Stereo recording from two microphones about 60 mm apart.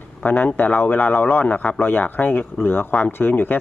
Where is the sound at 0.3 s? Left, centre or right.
Left.